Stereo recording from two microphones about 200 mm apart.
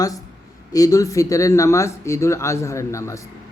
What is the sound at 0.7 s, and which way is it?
Speech, 15° left (ahead or behind).